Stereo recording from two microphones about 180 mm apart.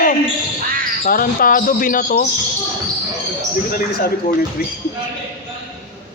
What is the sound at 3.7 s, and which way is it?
Speech, 50° left (ahead or behind).